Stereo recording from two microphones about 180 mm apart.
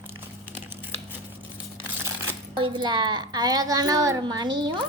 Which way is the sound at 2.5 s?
25° right (ahead or behind).